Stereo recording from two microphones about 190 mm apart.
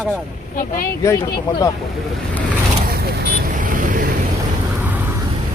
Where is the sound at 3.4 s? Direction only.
45° right (ahead or behind).